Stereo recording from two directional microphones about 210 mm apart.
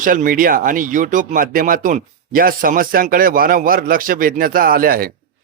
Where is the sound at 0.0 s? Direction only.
40° right (ahead or behind).